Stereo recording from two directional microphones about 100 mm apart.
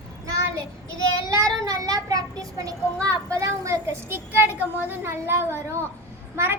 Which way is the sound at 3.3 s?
30° right (ahead or behind).